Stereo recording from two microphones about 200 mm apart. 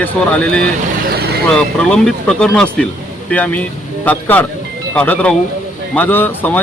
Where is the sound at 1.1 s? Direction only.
50° right (ahead or behind).